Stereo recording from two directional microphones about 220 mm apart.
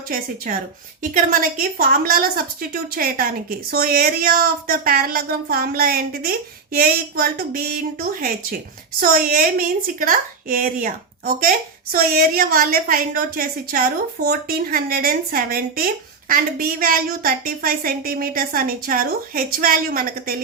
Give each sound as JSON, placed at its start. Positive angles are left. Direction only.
{"t": 1.1, "sound": "a woman's voice", "side_deg": -40}